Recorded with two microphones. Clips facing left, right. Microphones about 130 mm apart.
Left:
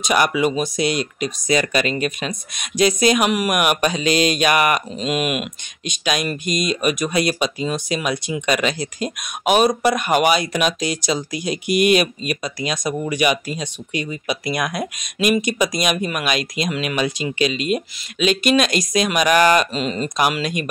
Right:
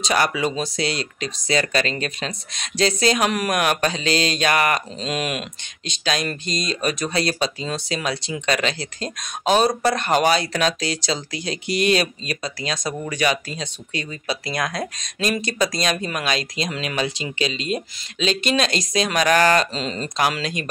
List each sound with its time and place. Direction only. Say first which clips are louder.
0.0 s speech: left 3 dB; 15° left (ahead or behind)
16.3 s speech: left 4 dB; 30° right (ahead or behind)
17.6 s speech: left 4 dB; 15° left (ahead or behind)
18.4 s speech: left 5 dB; 30° right (ahead or behind)
19.1 s speech: left 2 dB; 15° left (ahead or behind)